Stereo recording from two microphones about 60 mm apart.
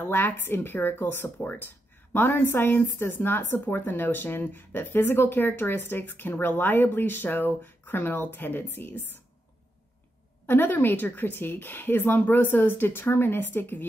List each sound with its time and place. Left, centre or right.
0.0 s speech: left
10.4 s speech: left